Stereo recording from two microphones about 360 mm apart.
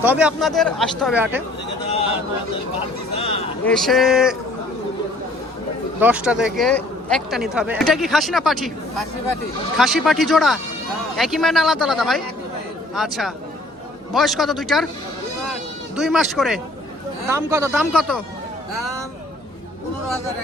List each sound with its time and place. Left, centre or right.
0.0 s speech: centre
3.2 s a sound: centre
3.6 s speech: centre
6.0 s speech: centre
9.7 s speech: centre
16.0 s speech: centre